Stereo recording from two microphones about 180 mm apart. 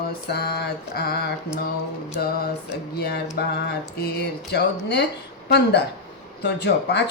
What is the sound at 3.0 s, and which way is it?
Mantra, 60° left (ahead or behind).